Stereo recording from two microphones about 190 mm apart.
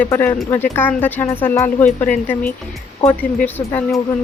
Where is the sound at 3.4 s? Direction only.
10° left (ahead or behind).